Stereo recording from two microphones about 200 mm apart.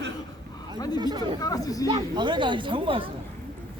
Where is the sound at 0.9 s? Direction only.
20° right (ahead or behind).